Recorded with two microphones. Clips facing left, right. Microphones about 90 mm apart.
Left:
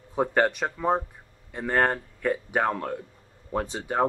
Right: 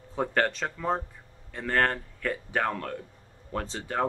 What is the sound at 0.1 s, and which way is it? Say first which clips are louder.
Speech: left 4 dB; 15° left (ahead or behind).